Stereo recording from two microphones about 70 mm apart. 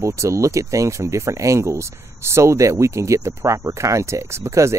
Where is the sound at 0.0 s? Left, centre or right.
Right.